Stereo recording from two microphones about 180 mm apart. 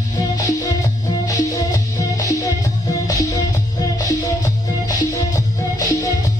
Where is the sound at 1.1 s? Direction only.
20° left (ahead or behind).